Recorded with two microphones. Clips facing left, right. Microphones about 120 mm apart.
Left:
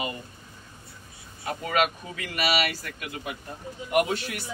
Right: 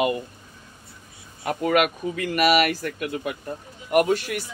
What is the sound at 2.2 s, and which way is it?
A man's voice, 50° right (ahead or behind).